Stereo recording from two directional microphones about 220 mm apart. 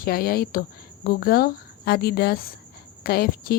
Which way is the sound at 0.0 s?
45° left (ahead or behind).